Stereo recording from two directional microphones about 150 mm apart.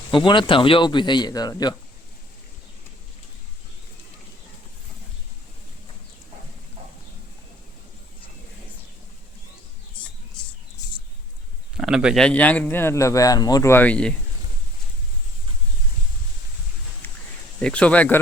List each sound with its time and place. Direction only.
0.1 s speech: 30° left (ahead or behind)
11.8 s speech: 5° right (ahead or behind)
17.6 s speech: 5° left (ahead or behind)